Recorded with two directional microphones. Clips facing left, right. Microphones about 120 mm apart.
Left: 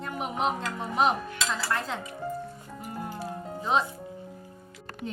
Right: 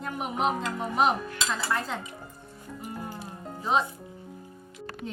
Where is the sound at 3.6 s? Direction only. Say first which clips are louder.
Even; centre (ahead or behind).